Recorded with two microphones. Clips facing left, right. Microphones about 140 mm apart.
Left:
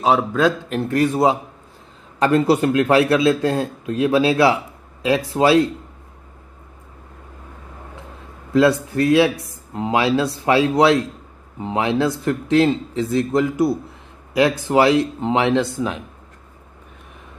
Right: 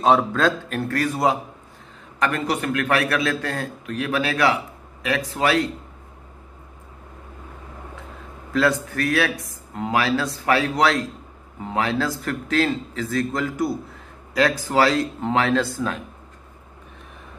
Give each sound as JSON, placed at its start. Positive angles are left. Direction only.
{"t": 0.0, "sound": "a man's voice", "side_deg": 10}
{"t": 0.7, "sound": "a man's voice", "side_deg": 20}
{"t": 8.9, "sound": "a man's voice", "side_deg": 25}